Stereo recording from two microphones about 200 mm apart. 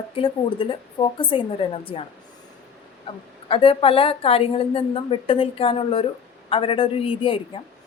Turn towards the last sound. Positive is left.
turn(degrees=25)  # may be behind; listen again after turning